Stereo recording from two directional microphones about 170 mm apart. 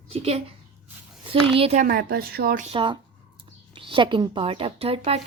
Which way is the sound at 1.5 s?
35° right (ahead or behind).